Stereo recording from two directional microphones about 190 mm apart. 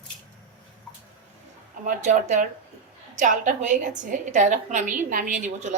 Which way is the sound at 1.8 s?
40° right (ahead or behind).